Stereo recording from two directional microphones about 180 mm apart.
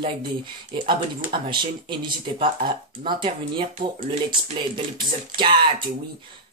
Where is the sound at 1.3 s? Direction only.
25° right (ahead or behind).